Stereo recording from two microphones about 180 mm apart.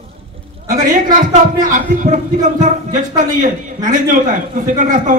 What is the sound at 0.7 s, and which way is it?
A man's voice, 45° right (ahead or behind).